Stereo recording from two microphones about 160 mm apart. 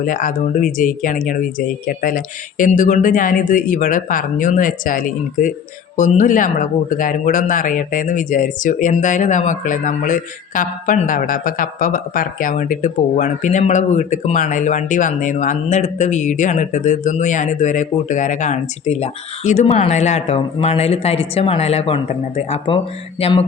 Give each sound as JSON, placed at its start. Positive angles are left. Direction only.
{"t": 0.0, "sound": "speech", "side_deg": 60}
{"t": 23.2, "sound": "mantra", "side_deg": 40}